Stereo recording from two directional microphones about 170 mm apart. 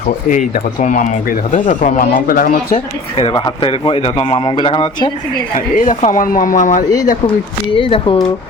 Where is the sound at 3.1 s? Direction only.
30° left (ahead or behind).